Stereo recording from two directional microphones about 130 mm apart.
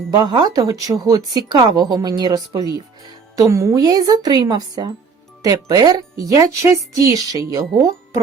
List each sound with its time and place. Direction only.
0.2 s speech: 30° right (ahead or behind)